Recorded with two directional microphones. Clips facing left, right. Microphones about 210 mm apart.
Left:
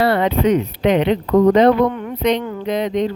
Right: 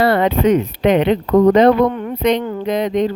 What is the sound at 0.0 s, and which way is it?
Speech, 50° right (ahead or behind).